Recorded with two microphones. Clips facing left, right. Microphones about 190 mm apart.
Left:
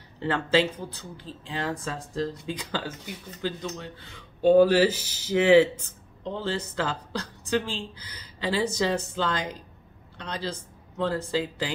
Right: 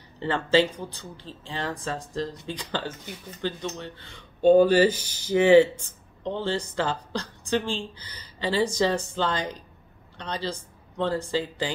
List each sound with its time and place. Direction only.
0.2 s speech: 5° left (ahead or behind)
8.0 s speech: 90° left
8.5 s speech: 5° left (ahead or behind)